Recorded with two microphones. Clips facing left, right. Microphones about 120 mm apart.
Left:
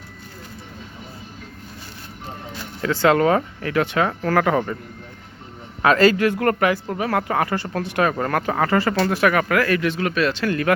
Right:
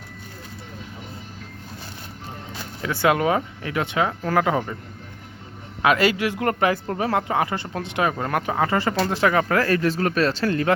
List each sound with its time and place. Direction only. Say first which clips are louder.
2.8 s speech: left 3 dB; 15° right (ahead or behind)
5.8 s speech: left 4 dB; 10° right (ahead or behind)
6.9 s speech: left 1 dB; 25° right (ahead or behind)